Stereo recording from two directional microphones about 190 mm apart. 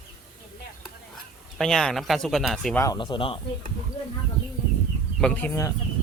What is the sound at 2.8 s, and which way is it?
Speech, 20° left (ahead or behind).